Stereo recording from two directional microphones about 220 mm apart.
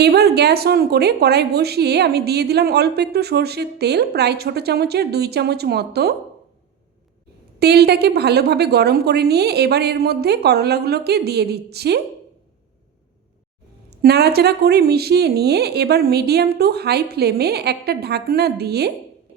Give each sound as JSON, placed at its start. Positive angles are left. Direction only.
{"t": 0.0, "sound": "a woman's voice", "side_deg": -45}
{"t": 7.6, "sound": "a woman's voice", "side_deg": -45}
{"t": 14.0, "sound": "a woman's voice", "side_deg": -45}